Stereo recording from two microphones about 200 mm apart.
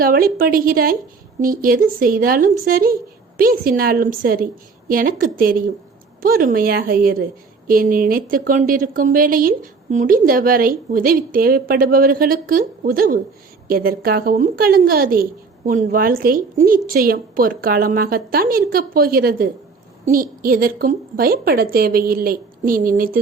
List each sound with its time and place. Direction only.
0.0 s a woman's voice: 45° right (ahead or behind)